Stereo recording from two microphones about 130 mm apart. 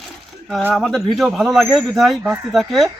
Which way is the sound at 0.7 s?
Centre (ahead or behind).